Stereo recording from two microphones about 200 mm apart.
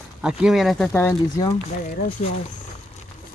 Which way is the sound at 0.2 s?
5° right (ahead or behind).